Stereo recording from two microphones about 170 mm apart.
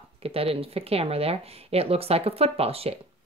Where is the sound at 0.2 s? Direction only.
35° right (ahead or behind).